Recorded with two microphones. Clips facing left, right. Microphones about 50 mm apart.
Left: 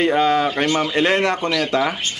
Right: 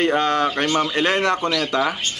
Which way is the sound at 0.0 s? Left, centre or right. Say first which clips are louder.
Left 2 dB; centre.